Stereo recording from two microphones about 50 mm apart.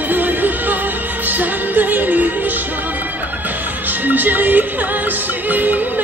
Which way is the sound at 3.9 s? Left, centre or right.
Right.